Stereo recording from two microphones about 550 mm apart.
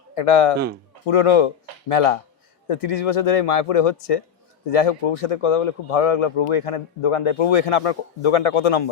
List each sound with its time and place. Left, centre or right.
0.1 s a man's voice: left